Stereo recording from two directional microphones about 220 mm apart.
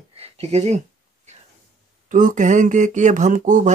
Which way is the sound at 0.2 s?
30° right (ahead or behind).